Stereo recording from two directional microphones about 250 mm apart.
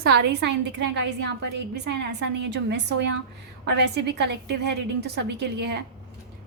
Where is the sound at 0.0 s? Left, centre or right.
Right.